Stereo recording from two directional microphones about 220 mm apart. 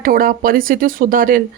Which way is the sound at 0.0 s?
40° right (ahead or behind).